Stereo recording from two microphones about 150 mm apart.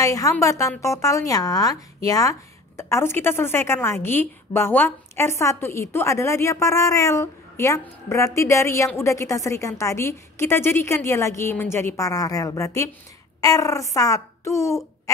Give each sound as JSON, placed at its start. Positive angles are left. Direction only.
{"t": 0.0, "sound": "a woman's voice", "side_deg": 20}